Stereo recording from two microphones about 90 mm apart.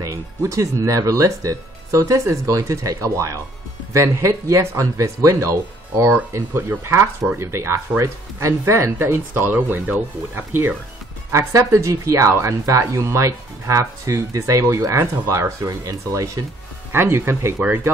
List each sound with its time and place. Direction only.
0.0 s speech: 35° right (ahead or behind)
11.3 s speech: 30° right (ahead or behind)
16.9 s speech: 25° right (ahead or behind)